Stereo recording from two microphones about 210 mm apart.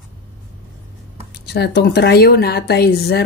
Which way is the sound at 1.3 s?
50° left (ahead or behind).